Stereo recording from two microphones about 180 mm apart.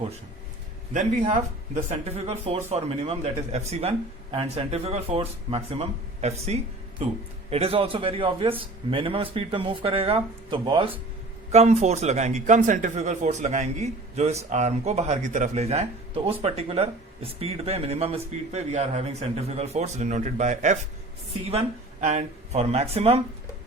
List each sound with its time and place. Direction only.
1.3 s a man's voice: 40° right (ahead or behind)
22.0 s speech: 35° right (ahead or behind)